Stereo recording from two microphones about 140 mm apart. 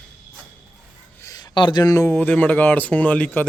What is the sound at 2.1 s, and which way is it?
Speech, 10° left (ahead or behind).